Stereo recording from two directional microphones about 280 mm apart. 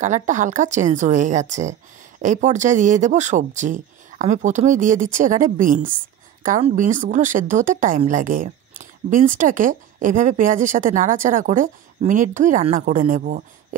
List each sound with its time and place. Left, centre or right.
0.0 s a woman's voice: right